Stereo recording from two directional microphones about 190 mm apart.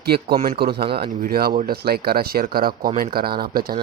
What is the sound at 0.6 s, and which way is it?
A man's voice, 55° right (ahead or behind).